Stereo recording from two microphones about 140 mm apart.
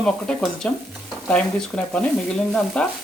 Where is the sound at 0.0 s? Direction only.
5° left (ahead or behind).